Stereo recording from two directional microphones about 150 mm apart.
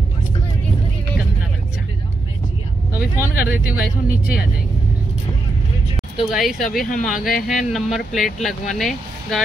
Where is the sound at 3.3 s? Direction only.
85° left.